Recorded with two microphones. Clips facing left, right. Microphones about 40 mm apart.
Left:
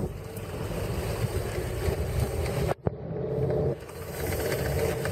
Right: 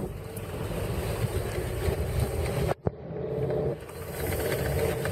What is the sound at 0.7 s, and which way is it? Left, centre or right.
Boat, right.